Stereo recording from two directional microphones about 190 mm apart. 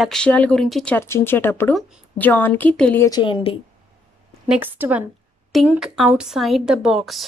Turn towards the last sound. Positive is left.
turn(degrees=0)  # may be behind; listen again after turning